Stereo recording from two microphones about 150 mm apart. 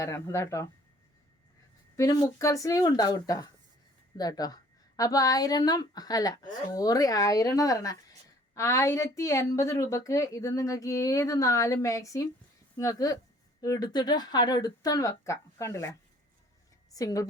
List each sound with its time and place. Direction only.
0.0 s speech: 20° left (ahead or behind)
2.0 s speech: 25° left (ahead or behind)